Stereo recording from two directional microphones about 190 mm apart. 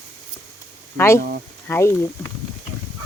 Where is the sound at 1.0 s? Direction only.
10° left (ahead or behind).